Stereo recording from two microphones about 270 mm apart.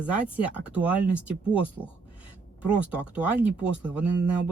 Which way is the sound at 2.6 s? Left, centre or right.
Centre.